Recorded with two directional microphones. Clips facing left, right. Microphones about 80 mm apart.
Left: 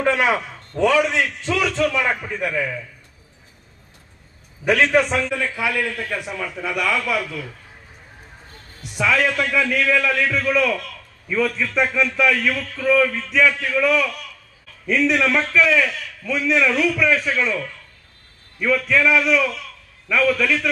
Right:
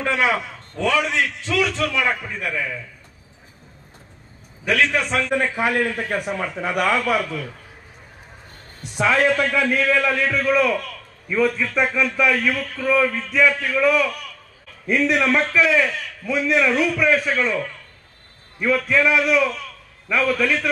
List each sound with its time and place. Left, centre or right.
0.0 s a man's voice: left
4.6 s a man's voice: left
5.3 s a man's voice: right
8.9 s a man's voice: right
11.2 s speech: centre
13.5 s a man's voice: right
13.7 s speech: centre
15.0 s a man's voice: right